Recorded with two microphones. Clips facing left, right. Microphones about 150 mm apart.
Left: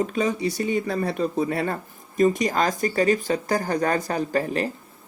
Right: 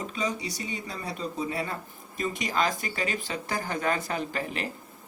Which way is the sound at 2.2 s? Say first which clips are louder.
Left 8 dB; 40° left (ahead or behind).